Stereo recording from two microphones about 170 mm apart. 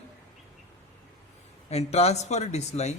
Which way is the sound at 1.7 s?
40° left (ahead or behind).